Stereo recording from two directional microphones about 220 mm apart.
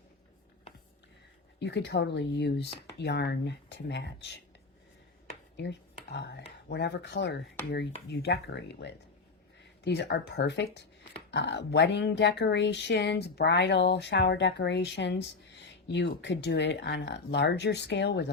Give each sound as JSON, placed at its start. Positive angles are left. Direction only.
{"t": 1.5, "sound": "speech", "side_deg": 50}
{"t": 5.5, "sound": "speech", "side_deg": 50}